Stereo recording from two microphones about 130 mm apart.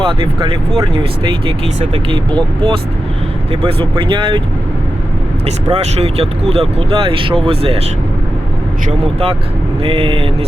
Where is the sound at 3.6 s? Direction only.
40° right (ahead or behind).